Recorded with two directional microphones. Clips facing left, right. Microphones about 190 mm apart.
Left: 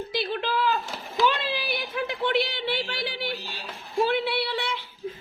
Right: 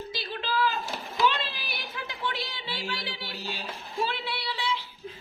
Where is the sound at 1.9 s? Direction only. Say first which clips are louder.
Left 9 dB; 55° left (ahead or behind).